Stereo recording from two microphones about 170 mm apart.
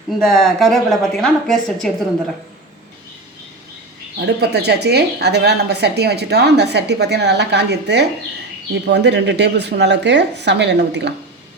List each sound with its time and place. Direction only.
0.2 s a woman's voice: centre (ahead or behind)
4.4 s a woman's voice: 75° right (ahead or behind)